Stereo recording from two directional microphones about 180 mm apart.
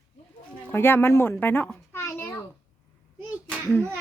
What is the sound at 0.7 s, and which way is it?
A child's voice, 10° left (ahead or behind).